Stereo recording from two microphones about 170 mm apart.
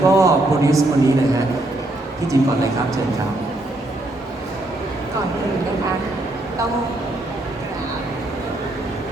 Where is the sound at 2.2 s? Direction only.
20° right (ahead or behind).